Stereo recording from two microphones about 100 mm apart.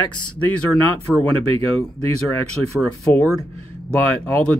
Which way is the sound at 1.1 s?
5° right (ahead or behind).